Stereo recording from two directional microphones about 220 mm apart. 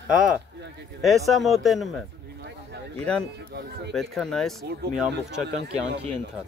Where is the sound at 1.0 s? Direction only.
Centre (ahead or behind).